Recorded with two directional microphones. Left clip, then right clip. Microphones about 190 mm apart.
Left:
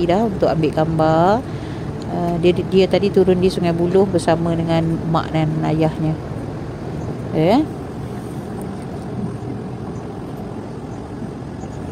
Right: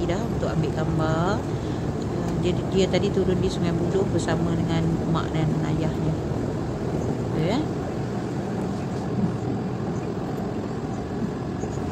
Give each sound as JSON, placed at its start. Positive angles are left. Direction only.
{"t": 0.0, "sound": "speech", "side_deg": 35}
{"t": 2.4, "sound": "speech", "side_deg": 40}